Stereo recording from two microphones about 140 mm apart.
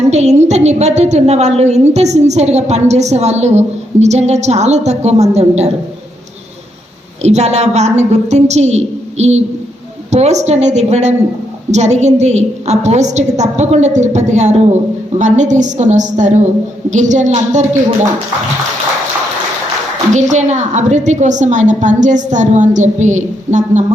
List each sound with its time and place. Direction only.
0.1 s a woman's voice: 50° right (ahead or behind)
7.2 s a woman's voice: 50° right (ahead or behind)
20.3 s a woman's voice: 55° right (ahead or behind)